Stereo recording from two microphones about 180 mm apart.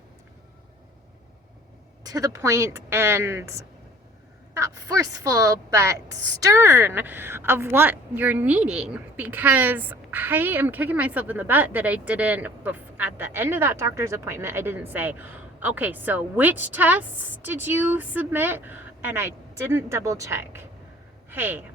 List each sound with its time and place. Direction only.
2.0 s a woman's voice: 20° right (ahead or behind)